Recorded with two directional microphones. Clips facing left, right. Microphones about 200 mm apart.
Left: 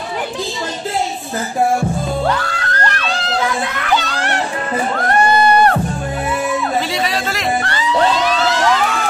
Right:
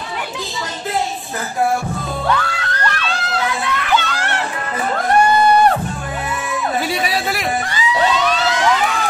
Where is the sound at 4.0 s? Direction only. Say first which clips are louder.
Left 2 dB; 35° left (ahead or behind).